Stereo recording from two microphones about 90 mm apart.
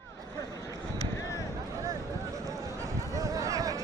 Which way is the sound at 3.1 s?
40° right (ahead or behind).